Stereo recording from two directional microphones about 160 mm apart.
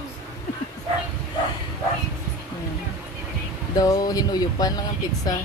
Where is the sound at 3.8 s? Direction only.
25° left (ahead or behind).